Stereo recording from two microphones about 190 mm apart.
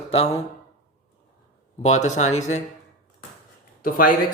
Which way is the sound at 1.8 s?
35° left (ahead or behind).